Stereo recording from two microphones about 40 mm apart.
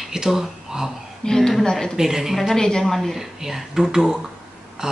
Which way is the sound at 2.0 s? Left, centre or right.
Centre.